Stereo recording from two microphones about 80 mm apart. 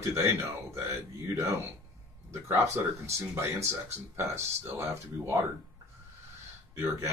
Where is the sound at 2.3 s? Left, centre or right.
Right.